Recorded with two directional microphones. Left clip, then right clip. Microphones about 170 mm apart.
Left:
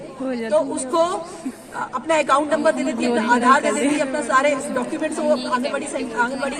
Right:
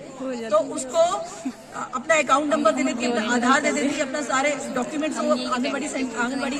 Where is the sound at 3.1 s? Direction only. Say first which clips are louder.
Left 6 dB; 10° left (ahead or behind).